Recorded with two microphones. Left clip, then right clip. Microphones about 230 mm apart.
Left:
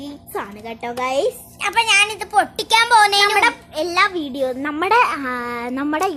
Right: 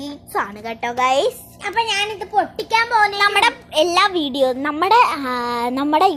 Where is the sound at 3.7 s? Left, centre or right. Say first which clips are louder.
Right 3 dB; centre.